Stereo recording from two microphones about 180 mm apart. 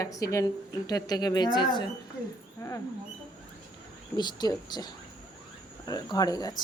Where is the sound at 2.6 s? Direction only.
20° left (ahead or behind).